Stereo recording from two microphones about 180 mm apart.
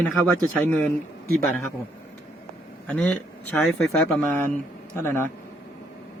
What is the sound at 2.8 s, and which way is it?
A man's voice, 10° left (ahead or behind).